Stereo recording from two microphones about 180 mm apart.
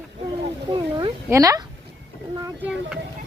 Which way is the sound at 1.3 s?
20° right (ahead or behind).